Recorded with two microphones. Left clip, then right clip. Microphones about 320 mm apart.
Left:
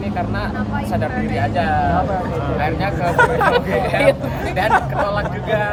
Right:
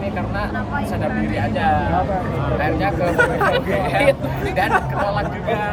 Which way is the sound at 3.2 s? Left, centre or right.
Left.